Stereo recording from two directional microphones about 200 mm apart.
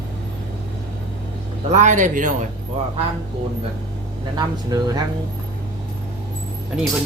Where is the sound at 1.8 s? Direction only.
40° right (ahead or behind).